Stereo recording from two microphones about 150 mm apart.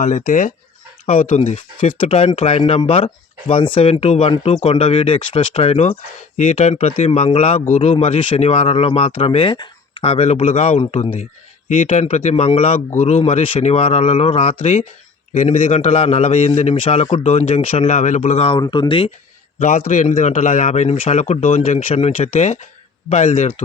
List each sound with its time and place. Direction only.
0.0 s a man's voice: 50° left (ahead or behind)
2.0 s a man's voice: 40° left (ahead or behind)
18.6 s speech: 30° left (ahead or behind)
19.5 s a man's voice: 50° left (ahead or behind)